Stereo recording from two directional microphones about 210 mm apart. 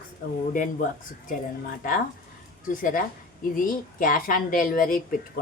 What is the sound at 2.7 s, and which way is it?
A woman's voice, 40° left (ahead or behind).